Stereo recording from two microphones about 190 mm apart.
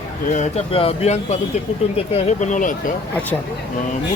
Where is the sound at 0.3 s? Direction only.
35° left (ahead or behind).